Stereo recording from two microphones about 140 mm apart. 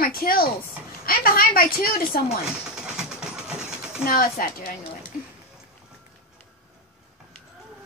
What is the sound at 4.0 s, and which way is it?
Speech, 90° left.